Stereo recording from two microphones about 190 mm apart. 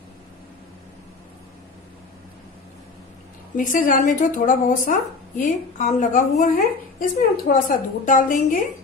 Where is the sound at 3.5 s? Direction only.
45° left (ahead or behind).